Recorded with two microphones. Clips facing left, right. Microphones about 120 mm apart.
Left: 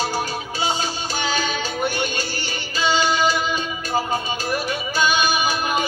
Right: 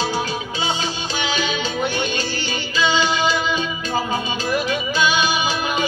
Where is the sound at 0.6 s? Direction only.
45° left (ahead or behind).